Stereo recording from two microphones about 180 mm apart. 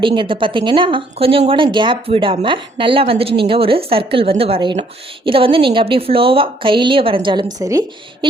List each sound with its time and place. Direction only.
0.0 s speech: 25° right (ahead or behind)